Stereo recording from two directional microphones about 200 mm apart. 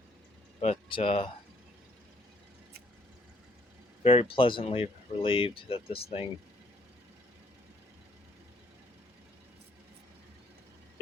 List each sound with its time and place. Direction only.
0.6 s speech: 30° left (ahead or behind)
4.0 s speech: 30° left (ahead or behind)